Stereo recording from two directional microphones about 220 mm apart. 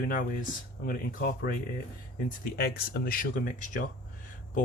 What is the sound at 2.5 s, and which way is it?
Speech, 45° left (ahead or behind).